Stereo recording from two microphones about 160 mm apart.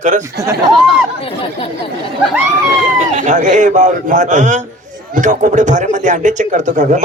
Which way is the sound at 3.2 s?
50° right (ahead or behind).